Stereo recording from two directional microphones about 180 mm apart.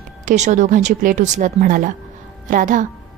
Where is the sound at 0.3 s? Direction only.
40° right (ahead or behind).